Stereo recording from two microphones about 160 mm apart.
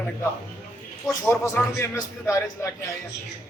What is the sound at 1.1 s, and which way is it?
A man's voice, 15° left (ahead or behind).